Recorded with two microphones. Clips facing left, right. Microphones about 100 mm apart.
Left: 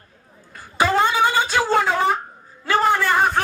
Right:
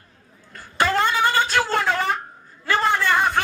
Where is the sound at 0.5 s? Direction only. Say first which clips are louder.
Left 2 dB; 10° left (ahead or behind).